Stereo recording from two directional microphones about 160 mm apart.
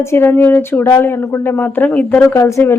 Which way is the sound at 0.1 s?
15° left (ahead or behind).